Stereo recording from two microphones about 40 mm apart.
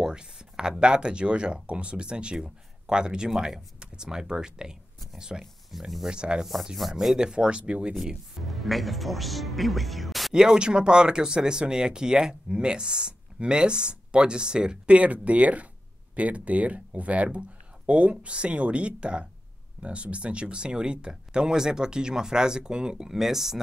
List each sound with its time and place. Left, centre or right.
0.0 s speech: centre
5.4 s speech: centre
6.0 s speech: right
6.9 s speech: centre
7.2 s speech: right
8.4 s speech: centre
10.3 s speech: centre
15.0 s speech: right; by 23.1 s centre
23.1 s speech: centre